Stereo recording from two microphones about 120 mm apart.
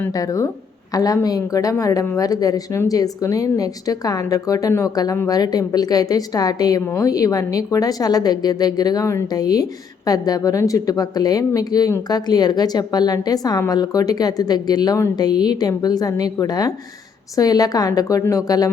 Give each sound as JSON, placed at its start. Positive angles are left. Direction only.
{"t": 0.1, "sound": "a woman's voice", "side_deg": 30}